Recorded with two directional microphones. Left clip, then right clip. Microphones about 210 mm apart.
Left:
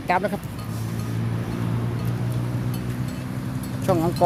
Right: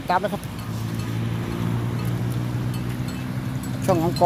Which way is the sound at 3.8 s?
5° right (ahead or behind).